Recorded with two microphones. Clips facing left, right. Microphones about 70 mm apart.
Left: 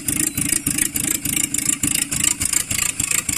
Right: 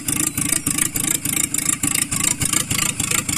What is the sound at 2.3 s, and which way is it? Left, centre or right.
Vehicle, right.